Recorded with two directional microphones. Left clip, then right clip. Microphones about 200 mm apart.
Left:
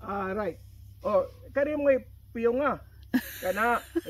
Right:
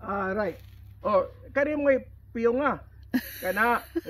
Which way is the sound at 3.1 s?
15° left (ahead or behind).